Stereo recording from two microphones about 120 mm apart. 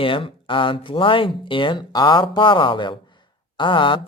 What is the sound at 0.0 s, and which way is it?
Speech, 45° left (ahead or behind).